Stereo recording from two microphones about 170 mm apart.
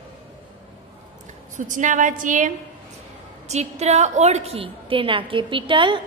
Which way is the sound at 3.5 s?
40° right (ahead or behind).